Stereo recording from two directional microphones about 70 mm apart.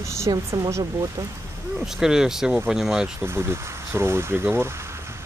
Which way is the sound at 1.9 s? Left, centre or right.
Centre.